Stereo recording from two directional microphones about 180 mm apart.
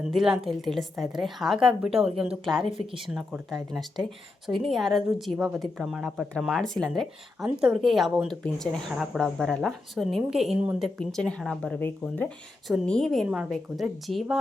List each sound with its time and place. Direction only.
0.0 s a woman's voice: 5° right (ahead or behind)
2.6 s speech: 30° right (ahead or behind)
3.2 s a woman's voice: centre (ahead or behind)